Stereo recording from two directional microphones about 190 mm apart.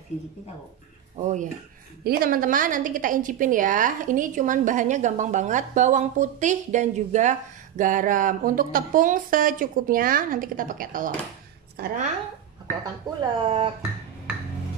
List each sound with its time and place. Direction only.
1.1 s speech: 40° right (ahead or behind)
2.0 s a woman's voice: 50° right (ahead or behind)
13.2 s speech: 25° right (ahead or behind)